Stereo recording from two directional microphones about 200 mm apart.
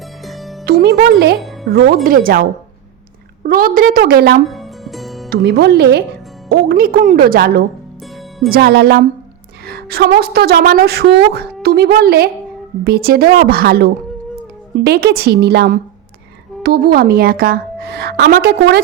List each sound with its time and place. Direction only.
0.3 s music: centre (ahead or behind)
0.6 s a woman's voice: 50° right (ahead or behind)
4.4 s music: centre (ahead or behind)
5.3 s a woman's voice: 55° right (ahead or behind)